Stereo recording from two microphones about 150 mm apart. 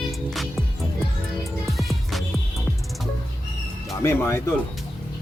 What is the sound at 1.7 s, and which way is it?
Music, centre (ahead or behind).